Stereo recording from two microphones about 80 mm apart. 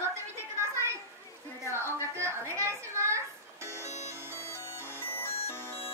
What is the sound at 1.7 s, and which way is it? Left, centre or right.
A woman's voice, right.